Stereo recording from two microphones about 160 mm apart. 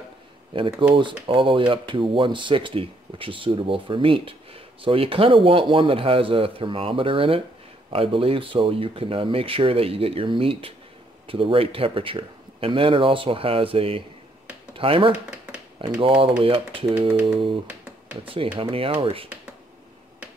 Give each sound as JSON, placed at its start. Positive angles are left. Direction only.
{"t": 0.5, "sound": "speech", "side_deg": -35}
{"t": 18.2, "sound": "speech", "side_deg": -35}